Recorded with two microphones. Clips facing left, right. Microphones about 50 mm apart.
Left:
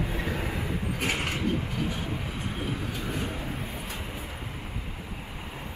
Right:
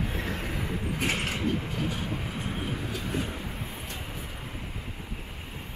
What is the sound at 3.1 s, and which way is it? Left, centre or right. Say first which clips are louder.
Vehicle: right 1 dB; centre.